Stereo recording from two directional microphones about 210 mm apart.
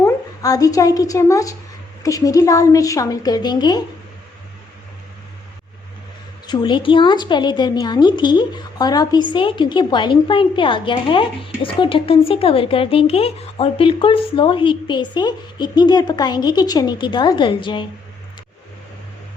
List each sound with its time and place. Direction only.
0.0 s a woman's voice: 15° left (ahead or behind)
6.5 s a woman's voice: 20° left (ahead or behind)